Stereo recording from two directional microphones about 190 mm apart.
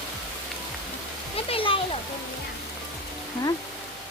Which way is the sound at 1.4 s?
30° left (ahead or behind).